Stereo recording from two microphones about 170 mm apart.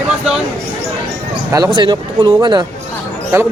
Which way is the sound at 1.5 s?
20° right (ahead or behind).